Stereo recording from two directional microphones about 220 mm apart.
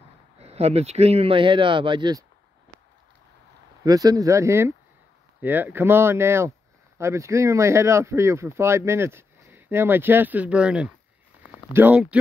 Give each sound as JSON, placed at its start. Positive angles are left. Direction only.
{"t": 0.4, "sound": "speech", "side_deg": -30}
{"t": 3.8, "sound": "speech", "side_deg": -15}